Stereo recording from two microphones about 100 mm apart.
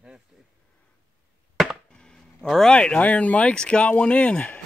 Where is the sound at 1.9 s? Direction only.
5° left (ahead or behind).